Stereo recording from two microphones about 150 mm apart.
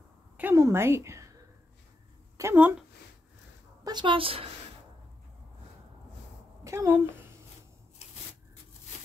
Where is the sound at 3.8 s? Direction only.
30° right (ahead or behind).